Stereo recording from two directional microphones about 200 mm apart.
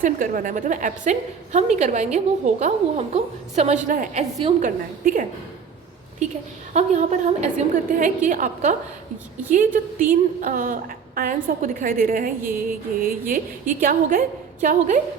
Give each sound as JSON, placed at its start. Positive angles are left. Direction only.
{"t": 0.0, "sound": "a woman's voice", "side_deg": -40}
{"t": 4.6, "sound": "a woman's voice", "side_deg": -40}
{"t": 6.7, "sound": "a woman's voice", "side_deg": -35}